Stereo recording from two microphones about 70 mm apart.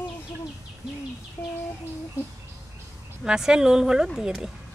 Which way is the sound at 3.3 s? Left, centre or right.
Centre.